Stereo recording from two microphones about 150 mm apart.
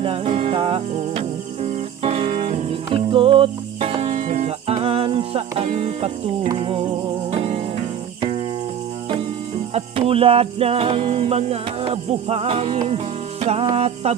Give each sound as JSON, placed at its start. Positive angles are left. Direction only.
{"t": 0.0, "sound": "music", "side_deg": -40}
{"t": 9.7, "sound": "music", "side_deg": -40}